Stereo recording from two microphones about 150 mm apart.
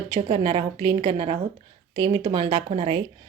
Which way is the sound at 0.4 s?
30° right (ahead or behind).